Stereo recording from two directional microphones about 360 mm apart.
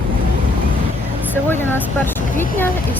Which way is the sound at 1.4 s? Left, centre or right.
Centre.